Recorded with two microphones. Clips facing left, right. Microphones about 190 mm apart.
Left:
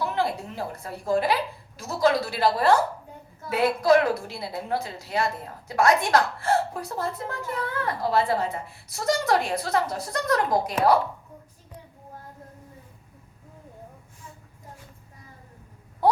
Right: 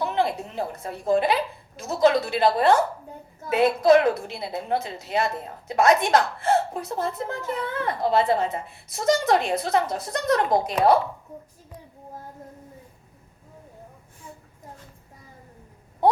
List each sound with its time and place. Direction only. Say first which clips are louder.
0.0 s a woman's voice: right 2 dB; 20° right (ahead or behind)